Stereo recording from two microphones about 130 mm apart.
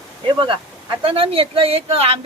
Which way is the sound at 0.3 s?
40° right (ahead or behind).